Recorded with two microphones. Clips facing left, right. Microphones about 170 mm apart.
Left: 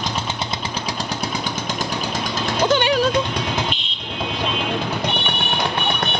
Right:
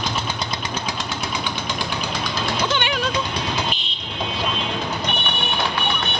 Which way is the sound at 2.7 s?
40° left (ahead or behind).